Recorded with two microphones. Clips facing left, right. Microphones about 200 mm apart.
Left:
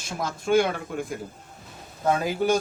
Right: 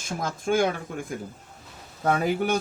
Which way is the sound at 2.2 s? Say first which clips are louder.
Left 1 dB; 60° right (ahead or behind).